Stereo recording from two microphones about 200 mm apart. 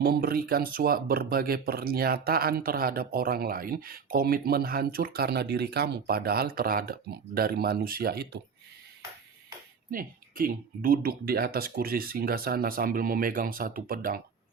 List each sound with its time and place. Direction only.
0.0 s speech: 45° right (ahead or behind)
9.9 s speech: 45° right (ahead or behind)